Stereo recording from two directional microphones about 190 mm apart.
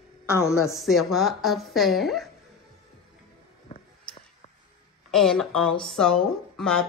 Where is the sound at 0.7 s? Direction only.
Centre (ahead or behind).